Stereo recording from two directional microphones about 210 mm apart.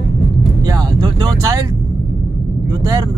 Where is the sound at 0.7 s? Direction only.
20° right (ahead or behind).